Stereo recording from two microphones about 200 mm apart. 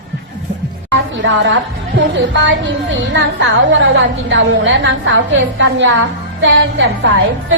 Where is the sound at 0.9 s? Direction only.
65° right (ahead or behind).